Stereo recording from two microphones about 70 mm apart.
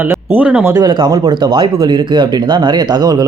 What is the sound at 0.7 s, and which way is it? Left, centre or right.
Speech, right.